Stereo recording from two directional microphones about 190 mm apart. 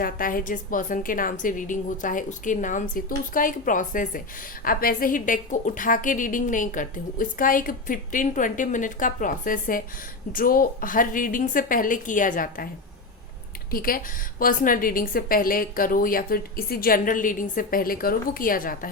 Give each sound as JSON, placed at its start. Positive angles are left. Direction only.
{"t": 0.0, "sound": "a woman's voice", "side_deg": 50}
{"t": 13.7, "sound": "a woman's voice", "side_deg": 50}